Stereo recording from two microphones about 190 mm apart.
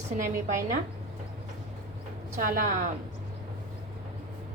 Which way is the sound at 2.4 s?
45° right (ahead or behind).